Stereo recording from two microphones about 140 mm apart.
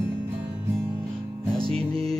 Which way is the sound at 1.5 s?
40° right (ahead or behind).